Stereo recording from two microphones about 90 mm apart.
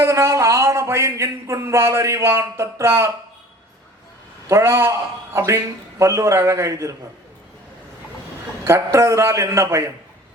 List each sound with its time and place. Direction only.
0.0 s a man's voice: 30° right (ahead or behind)
4.4 s a man's voice: 30° right (ahead or behind)
8.6 s a man's voice: 30° right (ahead or behind)